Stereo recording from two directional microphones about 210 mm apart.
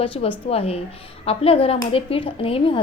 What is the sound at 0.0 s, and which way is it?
A woman's voice, 25° left (ahead or behind).